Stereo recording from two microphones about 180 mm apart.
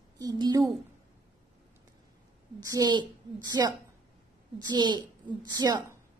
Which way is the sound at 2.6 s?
20° right (ahead or behind).